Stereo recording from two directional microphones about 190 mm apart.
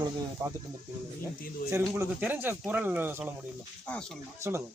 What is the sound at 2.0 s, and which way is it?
Speech, 10° right (ahead or behind).